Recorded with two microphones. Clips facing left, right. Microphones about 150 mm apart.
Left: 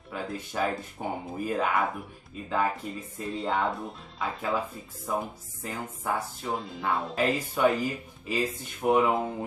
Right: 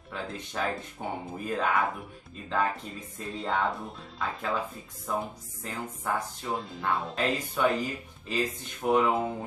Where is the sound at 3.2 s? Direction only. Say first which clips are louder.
Left 1 dB; centre (ahead or behind).